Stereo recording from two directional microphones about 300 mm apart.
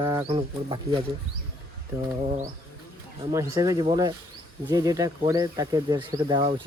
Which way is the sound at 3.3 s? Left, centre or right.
Centre.